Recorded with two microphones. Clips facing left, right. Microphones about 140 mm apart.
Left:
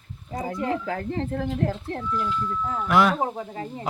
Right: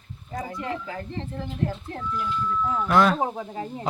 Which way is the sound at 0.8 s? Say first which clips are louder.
Left 6 dB; 65° left (ahead or behind).